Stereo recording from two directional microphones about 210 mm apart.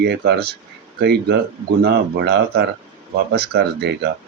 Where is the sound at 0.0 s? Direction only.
50° right (ahead or behind).